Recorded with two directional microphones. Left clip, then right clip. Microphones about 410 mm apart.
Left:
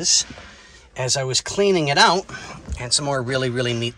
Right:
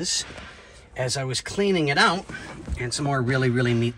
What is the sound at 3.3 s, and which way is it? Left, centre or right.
Speech, centre.